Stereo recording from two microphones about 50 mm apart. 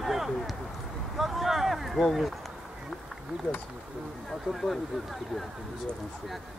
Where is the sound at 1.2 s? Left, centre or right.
Centre.